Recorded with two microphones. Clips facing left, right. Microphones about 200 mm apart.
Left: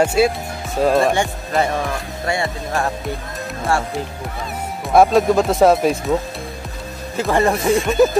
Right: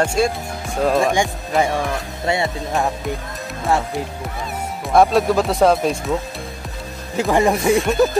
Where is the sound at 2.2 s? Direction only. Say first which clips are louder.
Right 1 dB; 25° right (ahead or behind).